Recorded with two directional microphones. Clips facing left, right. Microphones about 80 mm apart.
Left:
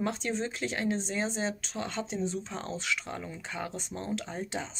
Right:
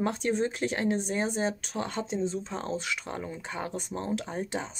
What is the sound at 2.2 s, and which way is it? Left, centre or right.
Speech, right.